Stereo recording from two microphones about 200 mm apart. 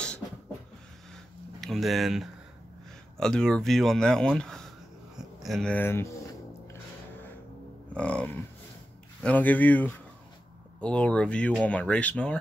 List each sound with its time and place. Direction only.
1.1 s a sound: centre (ahead or behind)
3.2 s speech: 5° left (ahead or behind)
7.9 s speech: 5° left (ahead or behind)